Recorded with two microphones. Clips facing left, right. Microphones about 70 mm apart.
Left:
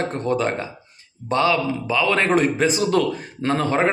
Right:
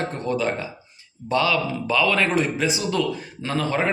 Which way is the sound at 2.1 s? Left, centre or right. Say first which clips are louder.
Left 3 dB; left.